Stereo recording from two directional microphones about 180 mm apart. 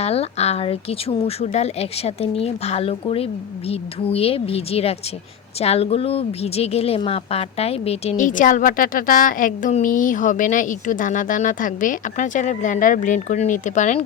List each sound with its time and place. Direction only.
0.0 s a woman's voice: 35° left (ahead or behind)